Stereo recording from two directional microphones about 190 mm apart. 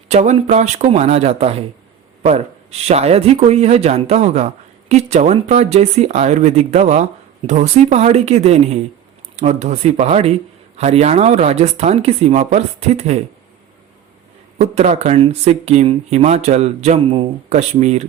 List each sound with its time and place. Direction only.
0.1 s speech: 35° right (ahead or behind)
14.6 s speech: 35° right (ahead or behind)